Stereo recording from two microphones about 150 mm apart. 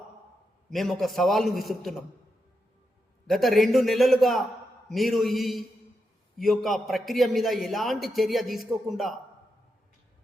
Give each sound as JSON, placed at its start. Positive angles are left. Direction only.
{"t": 0.7, "sound": "a man's voice", "side_deg": 0}
{"t": 3.2, "sound": "a man's voice", "side_deg": 0}